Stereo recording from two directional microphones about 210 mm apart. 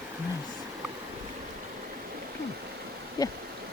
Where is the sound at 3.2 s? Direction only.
20° left (ahead or behind).